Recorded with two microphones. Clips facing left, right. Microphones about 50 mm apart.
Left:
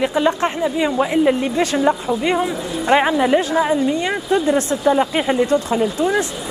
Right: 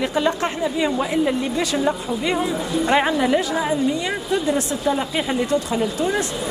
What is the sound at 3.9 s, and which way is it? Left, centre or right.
A woman's voice, left.